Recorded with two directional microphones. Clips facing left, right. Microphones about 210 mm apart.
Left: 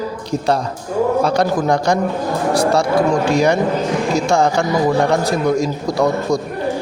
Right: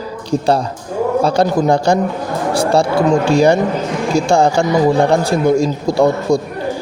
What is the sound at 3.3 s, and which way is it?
A man's voice, 30° right (ahead or behind).